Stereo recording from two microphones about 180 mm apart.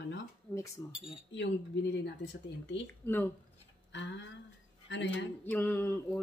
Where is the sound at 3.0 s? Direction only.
10° left (ahead or behind).